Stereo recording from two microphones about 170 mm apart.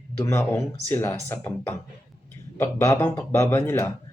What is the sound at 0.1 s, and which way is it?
Speech, 15° left (ahead or behind).